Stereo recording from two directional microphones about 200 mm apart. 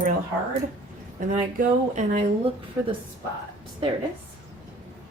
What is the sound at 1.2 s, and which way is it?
A woman's voice, 40° right (ahead or behind).